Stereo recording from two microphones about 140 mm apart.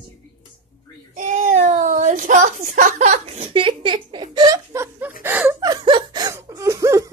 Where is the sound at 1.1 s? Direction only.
60° right (ahead or behind); by 4.9 s 25° right (ahead or behind).